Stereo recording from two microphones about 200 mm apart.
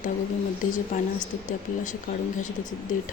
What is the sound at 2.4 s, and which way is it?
Speech, 40° left (ahead or behind).